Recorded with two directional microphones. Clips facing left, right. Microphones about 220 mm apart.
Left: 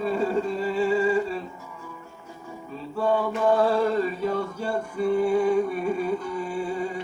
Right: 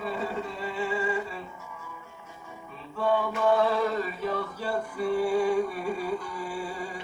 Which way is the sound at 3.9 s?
30° left (ahead or behind).